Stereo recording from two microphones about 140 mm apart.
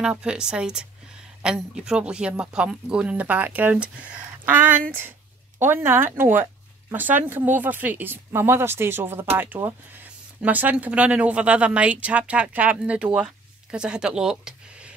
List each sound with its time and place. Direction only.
0.0 s speech: 5° right (ahead or behind)